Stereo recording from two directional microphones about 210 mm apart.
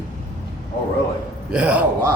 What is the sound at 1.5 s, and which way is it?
Speech, 5° right (ahead or behind).